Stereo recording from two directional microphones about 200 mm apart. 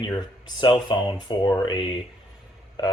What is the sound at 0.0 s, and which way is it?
Speech, 20° left (ahead or behind).